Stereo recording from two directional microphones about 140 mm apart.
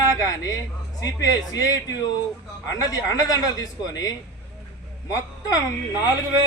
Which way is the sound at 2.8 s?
25° left (ahead or behind).